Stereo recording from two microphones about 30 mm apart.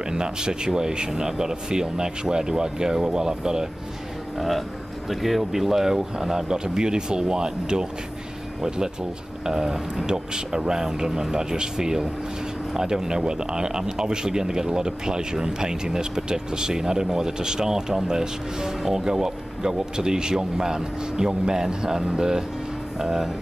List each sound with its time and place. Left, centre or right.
0.1 s speech: right
4.4 s a man's voice: centre